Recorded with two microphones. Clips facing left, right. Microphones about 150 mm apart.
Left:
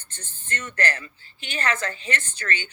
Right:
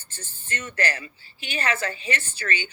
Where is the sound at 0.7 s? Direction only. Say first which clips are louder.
Even; 10° right (ahead or behind).